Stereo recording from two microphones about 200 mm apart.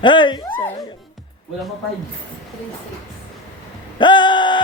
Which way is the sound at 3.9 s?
25° left (ahead or behind).